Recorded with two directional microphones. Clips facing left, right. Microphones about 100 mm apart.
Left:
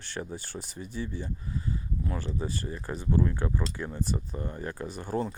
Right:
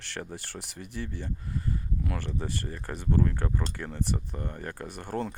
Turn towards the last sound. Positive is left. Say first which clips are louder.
# left 2 dB
turn(degrees=-60)  # may be behind; listen again after turning